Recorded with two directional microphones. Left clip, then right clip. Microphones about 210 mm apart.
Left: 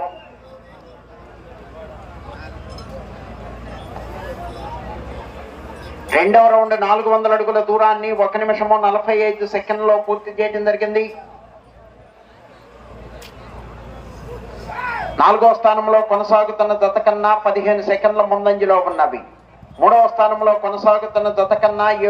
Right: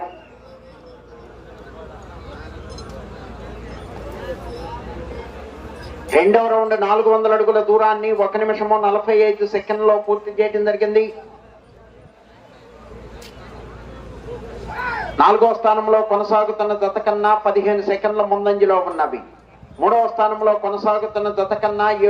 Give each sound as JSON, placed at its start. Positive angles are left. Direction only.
{"t": 6.3, "sound": "a man's voice", "side_deg": 35}
{"t": 15.2, "sound": "a man's voice", "side_deg": 35}